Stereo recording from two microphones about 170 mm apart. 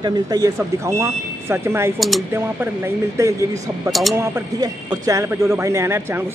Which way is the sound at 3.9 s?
Centre (ahead or behind).